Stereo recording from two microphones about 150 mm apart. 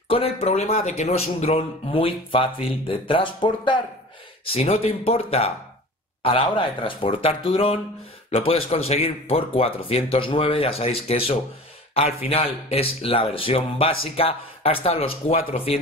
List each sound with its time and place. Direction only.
0.1 s a man's voice: 40° left (ahead or behind)
4.5 s a man's voice: 45° left (ahead or behind)